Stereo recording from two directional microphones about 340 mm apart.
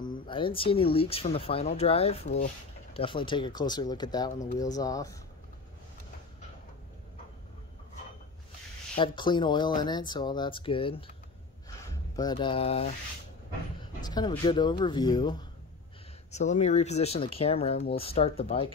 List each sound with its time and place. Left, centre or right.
0.1 s speech: centre
8.9 s speech: centre
14.0 s speech: centre